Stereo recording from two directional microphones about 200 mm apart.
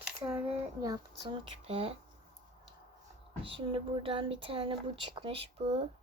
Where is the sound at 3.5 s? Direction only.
25° right (ahead or behind).